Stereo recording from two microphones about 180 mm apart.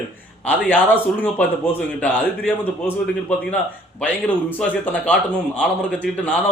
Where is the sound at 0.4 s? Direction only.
10° left (ahead or behind).